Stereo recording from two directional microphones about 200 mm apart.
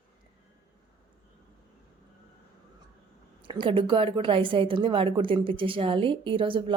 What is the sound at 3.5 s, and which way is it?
A woman's voice, 25° right (ahead or behind).